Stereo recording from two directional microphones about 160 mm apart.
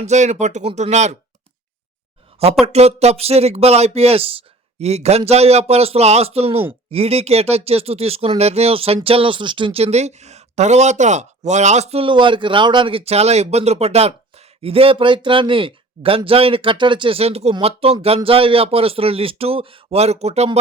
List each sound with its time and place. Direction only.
0.0 s speech: 45° right (ahead or behind)
2.4 s a woman's voice: 40° right (ahead or behind)